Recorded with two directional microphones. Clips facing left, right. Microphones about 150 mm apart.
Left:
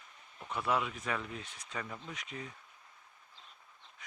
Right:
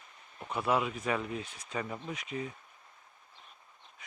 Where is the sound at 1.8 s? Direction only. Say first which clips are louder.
Right 5 dB; 20° right (ahead or behind).